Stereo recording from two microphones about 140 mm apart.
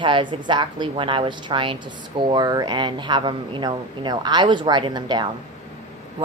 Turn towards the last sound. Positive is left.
turn(degrees=-30)  # may be behind; listen again after turning